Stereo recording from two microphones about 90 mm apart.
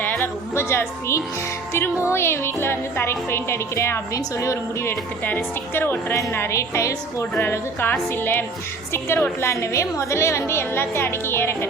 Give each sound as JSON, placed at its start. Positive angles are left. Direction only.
{"t": 0.2, "sound": "a woman's voice", "side_deg": 30}